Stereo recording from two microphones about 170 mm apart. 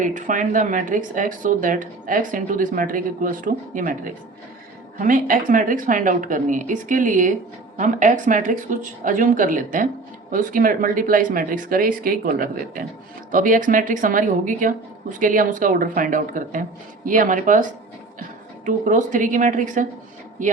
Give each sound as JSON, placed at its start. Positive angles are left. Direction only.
{"t": 0.0, "sound": "speech", "side_deg": -50}
{"t": 18.6, "sound": "speech", "side_deg": -50}